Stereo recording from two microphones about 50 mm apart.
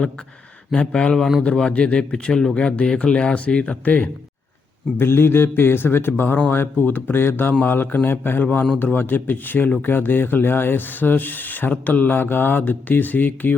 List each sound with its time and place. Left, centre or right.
0.7 s speech: left
4.9 s a man's voice: left